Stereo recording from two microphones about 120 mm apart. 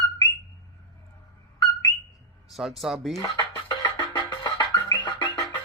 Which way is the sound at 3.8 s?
40° left (ahead or behind).